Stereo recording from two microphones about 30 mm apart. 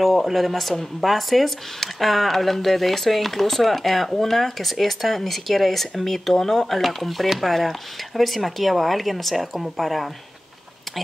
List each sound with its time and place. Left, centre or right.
0.0 s speech: centre